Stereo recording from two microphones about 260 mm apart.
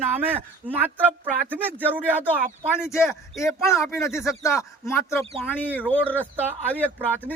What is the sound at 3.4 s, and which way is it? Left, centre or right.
A man's voice, centre.